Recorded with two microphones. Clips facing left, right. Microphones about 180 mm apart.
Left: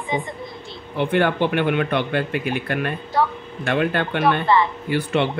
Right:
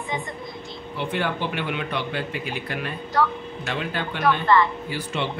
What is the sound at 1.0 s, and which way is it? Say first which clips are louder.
Speech: left 7 dB; 55° left (ahead or behind).